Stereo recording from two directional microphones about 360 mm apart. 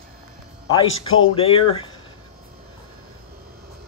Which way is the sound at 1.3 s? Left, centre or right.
Centre.